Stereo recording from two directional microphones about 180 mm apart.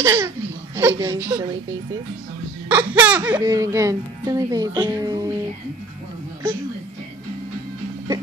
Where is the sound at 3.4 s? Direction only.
15° right (ahead or behind).